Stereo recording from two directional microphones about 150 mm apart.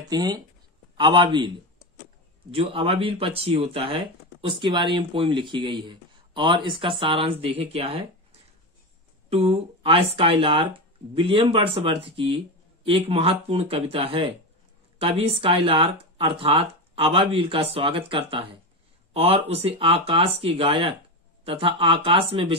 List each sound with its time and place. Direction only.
0.1 s speech: 30° right (ahead or behind)
2.5 s speech: 40° right (ahead or behind)